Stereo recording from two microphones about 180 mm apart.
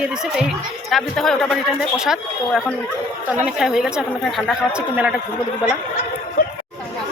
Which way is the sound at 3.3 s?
5° right (ahead or behind).